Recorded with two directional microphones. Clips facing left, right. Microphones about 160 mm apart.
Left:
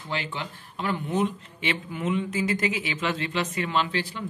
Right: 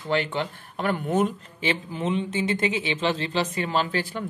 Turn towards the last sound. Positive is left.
turn(degrees=-50)  # may be behind; listen again after turning